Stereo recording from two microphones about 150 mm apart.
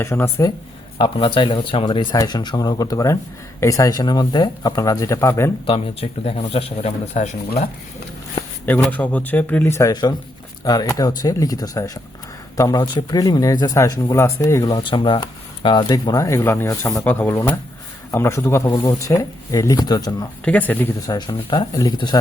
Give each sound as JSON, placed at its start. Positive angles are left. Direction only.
{"t": 0.0, "sound": "speech", "side_deg": 15}
{"t": 0.9, "sound": "speech", "side_deg": 35}
{"t": 5.6, "sound": "speech", "side_deg": 40}
{"t": 8.4, "sound": "a sound", "side_deg": 10}
{"t": 8.9, "sound": "speech", "side_deg": 10}
{"t": 20.4, "sound": "speech", "side_deg": 10}
{"t": 21.1, "sound": "speech", "side_deg": 30}